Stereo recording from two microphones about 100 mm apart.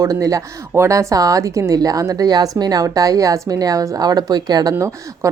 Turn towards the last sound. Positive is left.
turn(degrees=-40)  # may be behind; listen again after turning